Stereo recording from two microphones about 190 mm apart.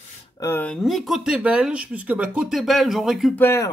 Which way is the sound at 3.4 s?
15° left (ahead or behind).